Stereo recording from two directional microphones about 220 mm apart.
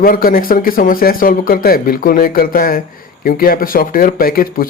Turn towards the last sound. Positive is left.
turn(degrees=40)  # may be behind; listen again after turning